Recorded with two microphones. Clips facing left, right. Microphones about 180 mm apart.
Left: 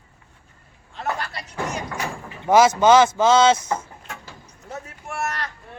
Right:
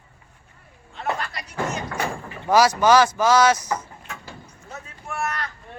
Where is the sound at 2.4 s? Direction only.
25° left (ahead or behind).